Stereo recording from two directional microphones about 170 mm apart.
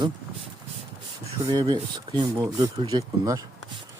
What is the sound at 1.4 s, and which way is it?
Speech, 25° right (ahead or behind).